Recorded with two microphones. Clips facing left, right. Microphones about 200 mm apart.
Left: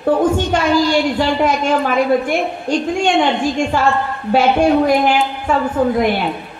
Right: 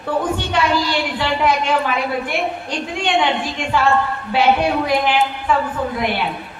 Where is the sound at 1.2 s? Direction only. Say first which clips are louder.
Left 3 dB; 45° left (ahead or behind).